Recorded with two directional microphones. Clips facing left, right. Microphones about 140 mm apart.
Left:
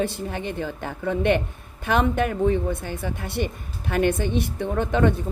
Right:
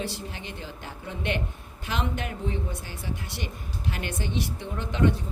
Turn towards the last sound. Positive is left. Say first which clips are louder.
# left 5 dB
turn(degrees=55)  # may be behind; listen again after turning